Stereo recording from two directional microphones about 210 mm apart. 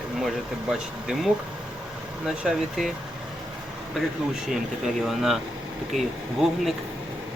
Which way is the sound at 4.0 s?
Centre (ahead or behind).